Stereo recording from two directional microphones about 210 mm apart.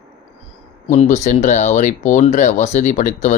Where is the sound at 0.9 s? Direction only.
35° left (ahead or behind).